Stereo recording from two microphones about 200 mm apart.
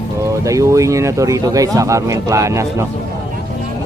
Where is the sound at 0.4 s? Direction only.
15° right (ahead or behind).